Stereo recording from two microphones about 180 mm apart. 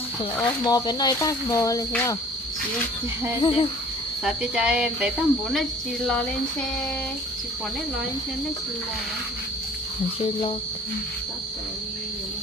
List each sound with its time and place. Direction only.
0.4 s speech: 20° left (ahead or behind)
3.3 s speech: 30° left (ahead or behind)
4.2 s speech: 5° right (ahead or behind)